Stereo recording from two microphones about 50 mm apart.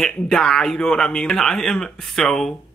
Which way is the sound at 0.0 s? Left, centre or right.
Centre.